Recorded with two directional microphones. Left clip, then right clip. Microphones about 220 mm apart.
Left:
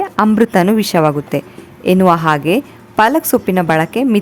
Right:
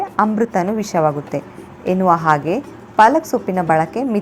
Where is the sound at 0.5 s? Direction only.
50° left (ahead or behind).